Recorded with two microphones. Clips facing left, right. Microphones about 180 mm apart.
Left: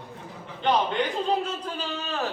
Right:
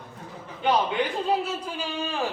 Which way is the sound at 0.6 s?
10° right (ahead or behind).